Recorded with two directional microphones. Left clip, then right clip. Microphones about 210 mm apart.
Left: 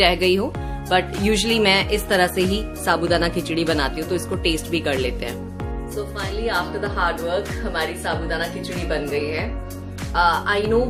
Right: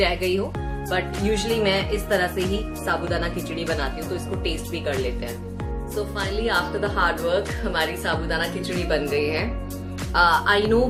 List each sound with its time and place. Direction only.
0.0 s speech: 50° left (ahead or behind)
6.1 s speech: 5° right (ahead or behind)